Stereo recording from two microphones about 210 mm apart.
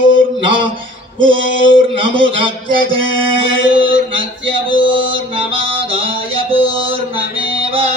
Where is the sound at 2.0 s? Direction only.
25° right (ahead or behind).